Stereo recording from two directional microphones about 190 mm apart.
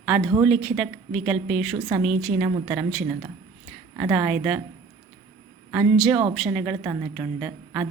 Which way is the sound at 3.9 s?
10° right (ahead or behind).